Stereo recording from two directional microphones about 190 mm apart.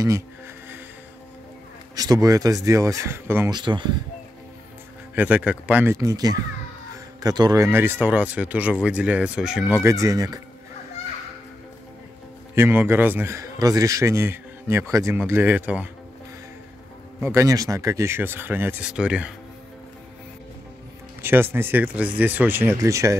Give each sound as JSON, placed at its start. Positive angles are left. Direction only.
{"t": 2.0, "sound": "a man's voice", "side_deg": -20}
{"t": 3.5, "sound": "speech", "side_deg": -25}
{"t": 5.1, "sound": "a man's voice", "side_deg": -10}
{"t": 12.5, "sound": "a man's voice", "side_deg": -15}
{"t": 17.2, "sound": "a man's voice", "side_deg": -15}
{"t": 21.2, "sound": "a man's voice", "side_deg": -10}